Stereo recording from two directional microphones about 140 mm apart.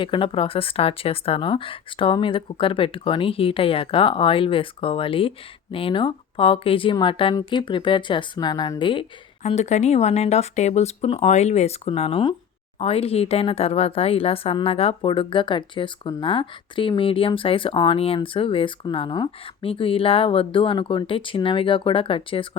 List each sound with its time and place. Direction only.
0.0 s speech: 40° left (ahead or behind)
9.4 s speech: 55° left (ahead or behind); by 22.4 s 40° left (ahead or behind)